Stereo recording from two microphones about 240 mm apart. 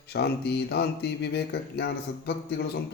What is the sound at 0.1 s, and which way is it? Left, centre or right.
Speech, left.